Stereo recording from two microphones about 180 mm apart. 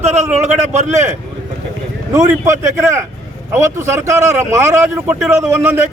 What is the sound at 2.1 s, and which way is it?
A man's voice, 15° right (ahead or behind).